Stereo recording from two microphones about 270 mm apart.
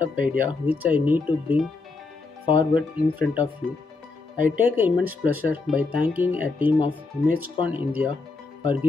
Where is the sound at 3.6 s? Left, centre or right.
Centre.